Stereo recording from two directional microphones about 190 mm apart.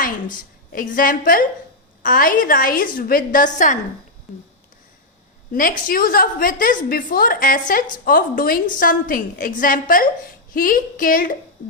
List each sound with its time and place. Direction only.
0.0 s a woman's voice: 45° left (ahead or behind)
5.5 s a woman's voice: 50° left (ahead or behind)